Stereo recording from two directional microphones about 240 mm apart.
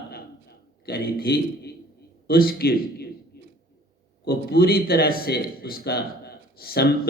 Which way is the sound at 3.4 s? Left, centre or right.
Left.